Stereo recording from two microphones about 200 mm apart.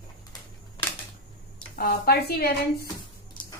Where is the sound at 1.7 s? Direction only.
50° left (ahead or behind).